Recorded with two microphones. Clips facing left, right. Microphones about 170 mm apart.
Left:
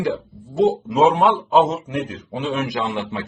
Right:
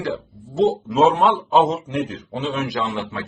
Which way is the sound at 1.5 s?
Centre (ahead or behind).